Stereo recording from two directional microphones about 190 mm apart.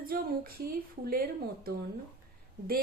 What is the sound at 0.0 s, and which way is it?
A woman's voice, 50° right (ahead or behind).